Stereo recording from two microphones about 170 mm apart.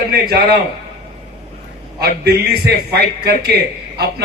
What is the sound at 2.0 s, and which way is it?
A man's voice, 70° right (ahead or behind).